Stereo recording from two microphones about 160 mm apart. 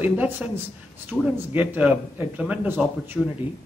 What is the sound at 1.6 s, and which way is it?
A man's voice, 10° right (ahead or behind).